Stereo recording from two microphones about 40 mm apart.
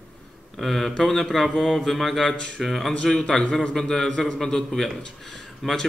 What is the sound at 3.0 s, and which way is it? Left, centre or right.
Speech, centre.